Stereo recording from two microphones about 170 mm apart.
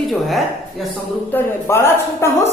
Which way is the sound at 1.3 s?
10° left (ahead or behind).